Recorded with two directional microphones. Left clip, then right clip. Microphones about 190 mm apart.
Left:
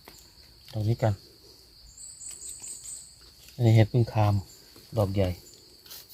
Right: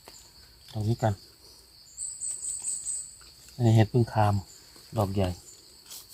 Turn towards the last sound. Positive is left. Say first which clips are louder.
# left 2 dB
turn(degrees=35)  # may be behind; listen again after turning